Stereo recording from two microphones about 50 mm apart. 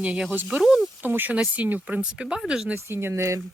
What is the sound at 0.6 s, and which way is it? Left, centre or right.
Speech, centre.